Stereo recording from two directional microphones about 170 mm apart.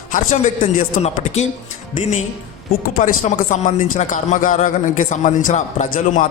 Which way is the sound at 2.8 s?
50° left (ahead or behind).